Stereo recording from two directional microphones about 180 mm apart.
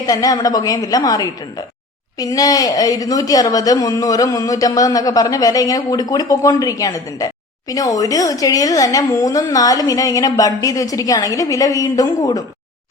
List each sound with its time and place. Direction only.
0.0 s a woman's voice: 20° left (ahead or behind)